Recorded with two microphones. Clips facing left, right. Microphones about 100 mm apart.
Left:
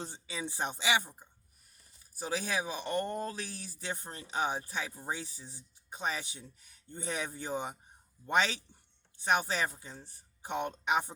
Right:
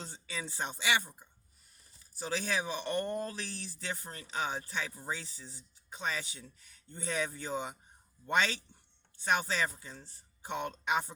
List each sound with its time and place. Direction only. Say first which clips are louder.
0.0 s speech: left 2 dB; 15° left (ahead or behind)